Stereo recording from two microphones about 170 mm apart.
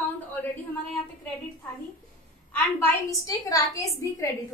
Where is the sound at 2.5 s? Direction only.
15° left (ahead or behind).